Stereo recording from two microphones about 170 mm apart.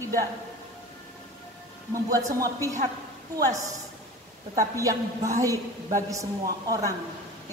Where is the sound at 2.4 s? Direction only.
20° right (ahead or behind).